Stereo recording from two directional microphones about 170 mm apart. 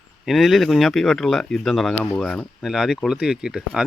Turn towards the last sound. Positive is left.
turn(degrees=-5)  # may be behind; listen again after turning